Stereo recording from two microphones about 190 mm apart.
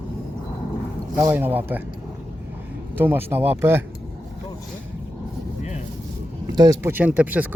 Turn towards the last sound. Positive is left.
turn(degrees=-10)  # may be behind; listen again after turning